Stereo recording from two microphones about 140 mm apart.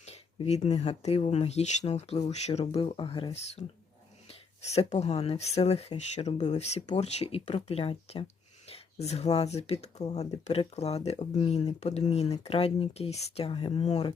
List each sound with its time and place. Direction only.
0.0 s speech: 50° left (ahead or behind)